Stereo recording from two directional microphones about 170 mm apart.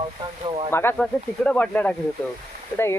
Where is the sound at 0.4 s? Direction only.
30° right (ahead or behind).